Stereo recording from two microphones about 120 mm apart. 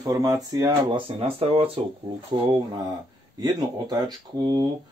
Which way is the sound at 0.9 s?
50° right (ahead or behind).